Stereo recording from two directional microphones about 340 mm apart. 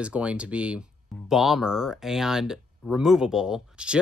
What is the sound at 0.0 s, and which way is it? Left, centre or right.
Speech, centre.